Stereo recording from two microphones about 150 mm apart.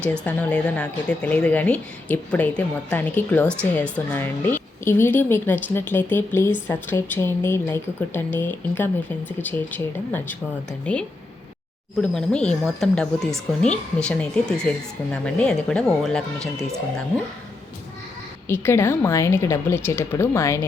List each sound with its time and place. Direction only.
0.0 s a woman's voice: 10° left (ahead or behind)
18.4 s a woman's voice: 15° left (ahead or behind)